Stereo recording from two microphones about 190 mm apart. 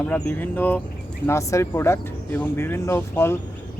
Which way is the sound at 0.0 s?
10° left (ahead or behind).